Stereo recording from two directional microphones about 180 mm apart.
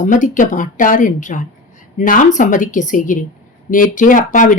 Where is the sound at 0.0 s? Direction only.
45° left (ahead or behind).